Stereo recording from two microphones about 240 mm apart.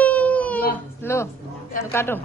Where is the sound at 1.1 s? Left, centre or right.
Centre.